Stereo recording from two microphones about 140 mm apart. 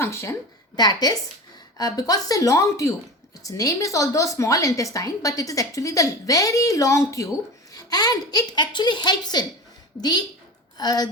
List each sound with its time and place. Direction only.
0.0 s a woman's voice: 20° left (ahead or behind)